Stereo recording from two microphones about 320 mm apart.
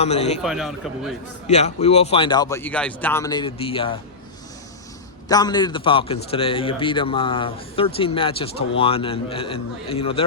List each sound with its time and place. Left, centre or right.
0.0 s a man's voice: centre
0.4 s speech: centre
1.5 s speech: left
5.3 s speech: centre